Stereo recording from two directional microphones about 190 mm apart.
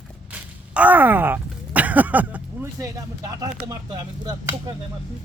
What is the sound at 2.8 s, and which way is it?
Speech, 20° right (ahead or behind).